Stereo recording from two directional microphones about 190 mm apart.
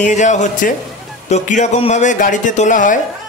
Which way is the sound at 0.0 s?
40° left (ahead or behind).